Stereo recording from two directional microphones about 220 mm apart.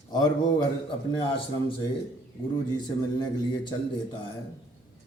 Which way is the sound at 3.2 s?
20° left (ahead or behind).